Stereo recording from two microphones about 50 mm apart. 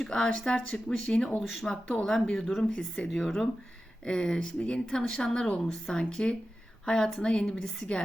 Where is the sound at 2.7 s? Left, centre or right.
Left.